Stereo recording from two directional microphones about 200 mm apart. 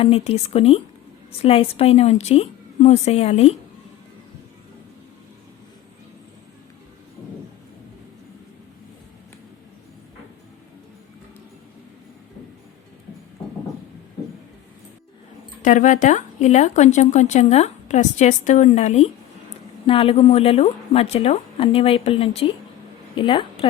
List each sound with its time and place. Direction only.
0.0 s speech: 30° left (ahead or behind)
15.6 s a woman's voice: 40° left (ahead or behind)